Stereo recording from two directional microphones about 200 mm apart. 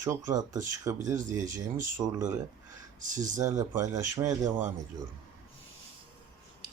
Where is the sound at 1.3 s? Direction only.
40° right (ahead or behind).